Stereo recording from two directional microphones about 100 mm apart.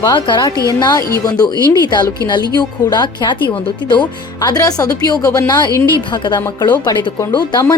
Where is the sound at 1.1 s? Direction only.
40° left (ahead or behind).